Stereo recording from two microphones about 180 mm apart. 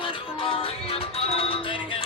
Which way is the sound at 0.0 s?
30° left (ahead or behind).